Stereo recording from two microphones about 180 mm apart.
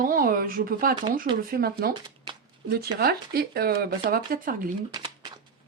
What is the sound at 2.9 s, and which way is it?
Speech, 60° right (ahead or behind).